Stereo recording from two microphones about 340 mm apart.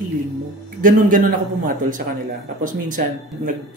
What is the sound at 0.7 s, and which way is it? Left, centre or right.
Speech, right.